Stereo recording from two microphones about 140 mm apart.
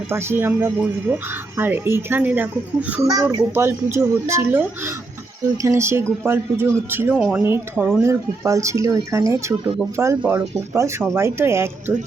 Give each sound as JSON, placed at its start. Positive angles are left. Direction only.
{"t": 0.1, "sound": "speech", "side_deg": -15}
{"t": 7.4, "sound": "speech", "side_deg": -15}